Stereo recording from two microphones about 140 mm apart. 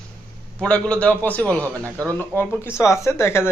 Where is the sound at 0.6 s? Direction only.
10° left (ahead or behind).